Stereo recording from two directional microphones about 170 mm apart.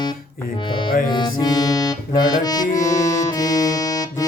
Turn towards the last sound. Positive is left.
turn(degrees=20)  # may be behind; listen again after turning